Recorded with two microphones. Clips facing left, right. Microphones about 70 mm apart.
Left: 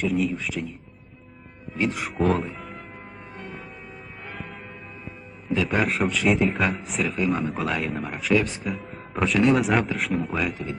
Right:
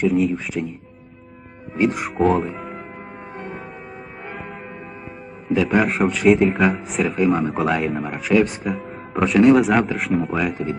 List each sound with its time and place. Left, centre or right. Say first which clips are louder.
0.0 s a man's voice: right 6 dB; centre
0.6 s speech: right 6 dB; centre
2.0 s a man's voice: right 5 dB; centre
2.6 s music: right 6 dB; centre
3.3 s church bell: right 6 dB; right
4.3 s church bell: right 4 dB; centre
5.5 s a man's voice: right 5 dB; centre